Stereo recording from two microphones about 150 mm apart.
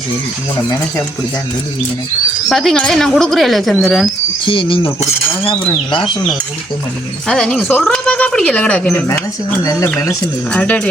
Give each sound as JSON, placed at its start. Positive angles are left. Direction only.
{"t": 2.5, "sound": "speech", "side_deg": 0}
{"t": 4.4, "sound": "speech", "side_deg": 35}
{"t": 7.3, "sound": "speech", "side_deg": 5}
{"t": 10.5, "sound": "speech", "side_deg": 5}